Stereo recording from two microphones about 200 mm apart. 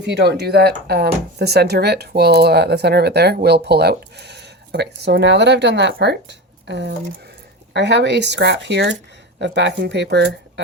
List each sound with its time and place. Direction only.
0.0 s speech: 55° right (ahead or behind)